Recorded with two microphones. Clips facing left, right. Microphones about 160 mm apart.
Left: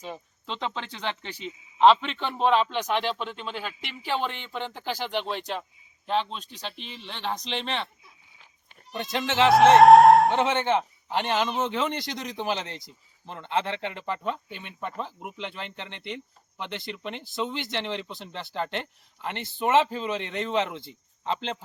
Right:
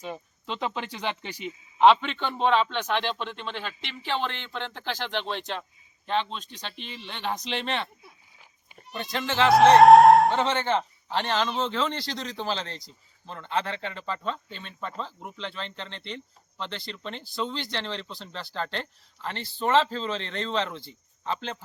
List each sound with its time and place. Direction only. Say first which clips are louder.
0.0 s speech: right 2 dB; centre (ahead or behind)
1.8 s a man's voice: even; centre (ahead or behind)
9.0 s speech: left 2 dB; 20° left (ahead or behind)
9.5 s speech: even; centre (ahead or behind)
10.3 s a man's voice: left 1 dB; 20° left (ahead or behind)